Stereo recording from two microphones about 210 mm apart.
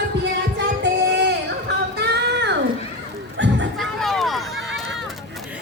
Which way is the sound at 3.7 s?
Centre (ahead or behind).